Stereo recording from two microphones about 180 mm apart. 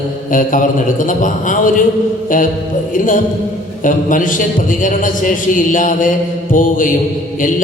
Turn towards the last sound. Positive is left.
turn(degrees=50)  # may be behind; listen again after turning